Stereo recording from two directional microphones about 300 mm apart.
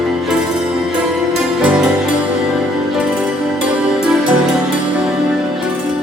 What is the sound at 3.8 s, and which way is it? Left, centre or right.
Music, centre.